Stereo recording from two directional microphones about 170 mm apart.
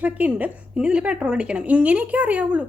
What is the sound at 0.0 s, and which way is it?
A woman's voice, 10° right (ahead or behind).